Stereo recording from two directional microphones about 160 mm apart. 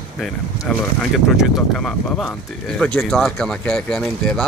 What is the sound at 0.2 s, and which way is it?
Speech, centre (ahead or behind).